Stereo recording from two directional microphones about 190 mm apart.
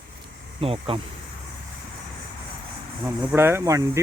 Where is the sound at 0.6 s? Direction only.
30° right (ahead or behind).